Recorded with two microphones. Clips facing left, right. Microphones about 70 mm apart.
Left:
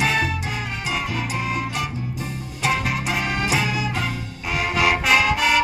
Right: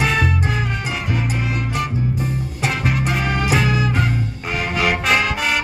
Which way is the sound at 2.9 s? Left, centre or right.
Centre.